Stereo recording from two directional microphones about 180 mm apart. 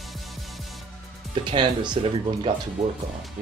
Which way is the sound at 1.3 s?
25° right (ahead or behind).